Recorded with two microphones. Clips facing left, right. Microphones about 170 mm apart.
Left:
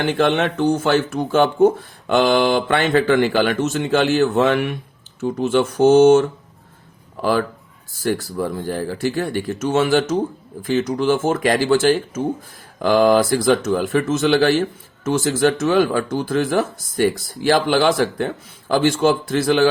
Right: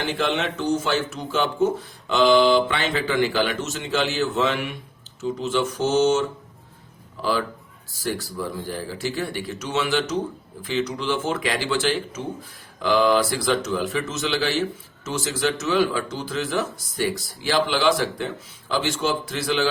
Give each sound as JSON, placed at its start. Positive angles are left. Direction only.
{"t": 0.0, "sound": "speech", "side_deg": 55}